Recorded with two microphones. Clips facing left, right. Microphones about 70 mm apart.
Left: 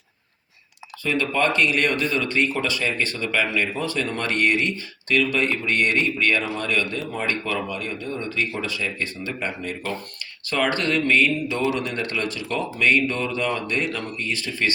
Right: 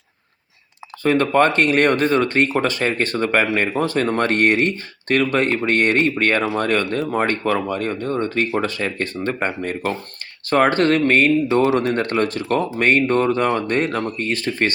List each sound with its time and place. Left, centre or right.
1.0 s speech: right
11.6 s speech: right